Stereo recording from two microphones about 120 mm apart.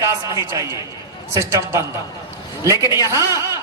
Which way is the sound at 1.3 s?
25° right (ahead or behind).